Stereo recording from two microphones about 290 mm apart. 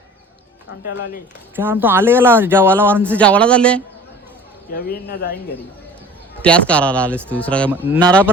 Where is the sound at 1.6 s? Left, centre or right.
Centre.